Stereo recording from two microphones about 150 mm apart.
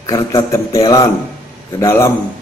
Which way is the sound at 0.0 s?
20° left (ahead or behind).